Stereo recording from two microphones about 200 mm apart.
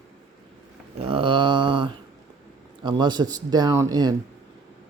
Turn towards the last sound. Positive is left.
turn(degrees=-20)  # may be behind; listen again after turning